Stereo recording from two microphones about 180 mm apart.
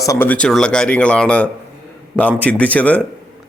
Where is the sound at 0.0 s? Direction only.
15° left (ahead or behind).